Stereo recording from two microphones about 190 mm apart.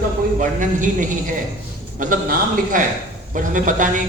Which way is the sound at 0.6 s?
45° right (ahead or behind).